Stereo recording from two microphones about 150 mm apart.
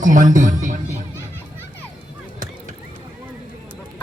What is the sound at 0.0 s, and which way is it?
Speech, 60° right (ahead or behind).